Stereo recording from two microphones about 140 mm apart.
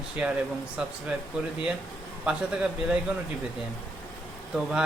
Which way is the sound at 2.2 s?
5° right (ahead or behind).